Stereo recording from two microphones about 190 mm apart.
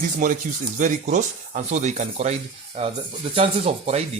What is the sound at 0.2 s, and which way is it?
Speech, 45° right (ahead or behind).